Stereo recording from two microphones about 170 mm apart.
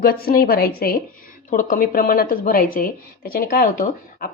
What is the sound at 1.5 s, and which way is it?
Speech, 50° left (ahead or behind).